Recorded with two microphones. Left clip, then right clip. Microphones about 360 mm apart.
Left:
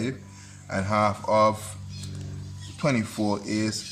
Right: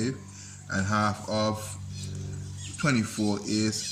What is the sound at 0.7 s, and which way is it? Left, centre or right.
Speech, centre.